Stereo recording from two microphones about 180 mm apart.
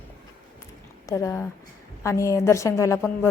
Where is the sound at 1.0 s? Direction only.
15° left (ahead or behind).